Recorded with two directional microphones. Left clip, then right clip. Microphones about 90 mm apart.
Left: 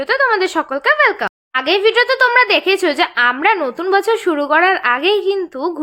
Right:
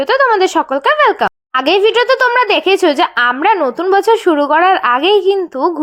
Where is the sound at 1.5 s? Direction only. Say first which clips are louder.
Right 2 dB; 70° right (ahead or behind).